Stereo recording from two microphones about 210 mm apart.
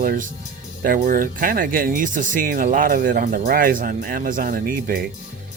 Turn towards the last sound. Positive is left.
turn(degrees=-45)  # may be behind; listen again after turning